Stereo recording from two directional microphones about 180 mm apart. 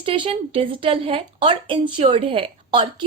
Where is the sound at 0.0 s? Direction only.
30° right (ahead or behind).